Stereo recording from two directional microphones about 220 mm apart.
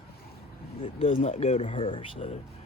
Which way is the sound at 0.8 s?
25° left (ahead or behind).